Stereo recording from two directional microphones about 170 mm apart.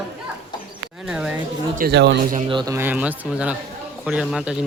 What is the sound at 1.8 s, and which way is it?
Speech, 85° right.